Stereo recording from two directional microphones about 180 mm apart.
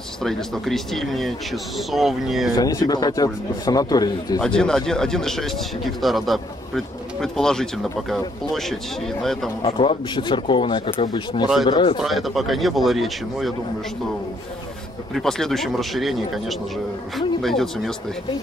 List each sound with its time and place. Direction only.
0.2 s speech: centre (ahead or behind)
2.5 s speech: 20° left (ahead or behind)
4.4 s speech: 5° left (ahead or behind)
9.6 s speech: 30° left (ahead or behind)
12.0 s speech: centre (ahead or behind)
15.1 s speech: centre (ahead or behind)